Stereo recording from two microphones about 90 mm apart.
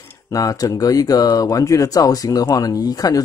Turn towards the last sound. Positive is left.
turn(degrees=45)  # may be behind; listen again after turning